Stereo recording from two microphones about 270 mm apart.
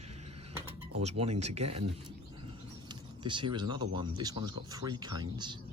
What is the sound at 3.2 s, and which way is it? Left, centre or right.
Speech, centre.